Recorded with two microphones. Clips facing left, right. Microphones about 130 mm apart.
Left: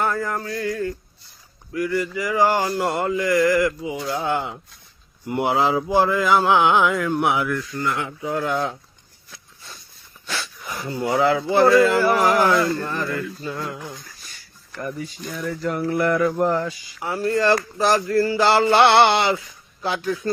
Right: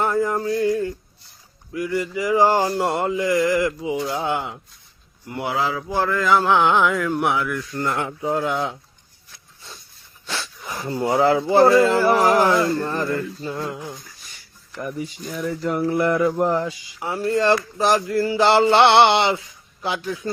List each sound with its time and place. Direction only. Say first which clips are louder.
0.0 s speech: right 3 dB; 20° right (ahead or behind)
5.3 s speech: left 4 dB; 25° left (ahead or behind); by 7.3 s centre (ahead or behind)
7.8 s speech: right 1 dB; 40° right (ahead or behind)
8.3 s speech: right 1 dB; 20° right (ahead or behind)
10.2 s a sound: even; 25° right (ahead or behind)
10.9 s speech: right 2 dB; 30° right (ahead or behind)
14.8 s speech: right 1 dB; 15° right (ahead or behind)